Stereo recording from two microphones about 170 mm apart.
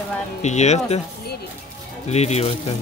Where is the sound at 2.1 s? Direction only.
40° left (ahead or behind).